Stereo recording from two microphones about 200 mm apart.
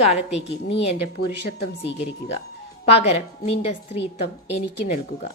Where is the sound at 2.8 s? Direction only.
30° left (ahead or behind).